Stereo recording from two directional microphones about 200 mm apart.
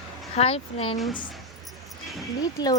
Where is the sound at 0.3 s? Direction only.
30° left (ahead or behind).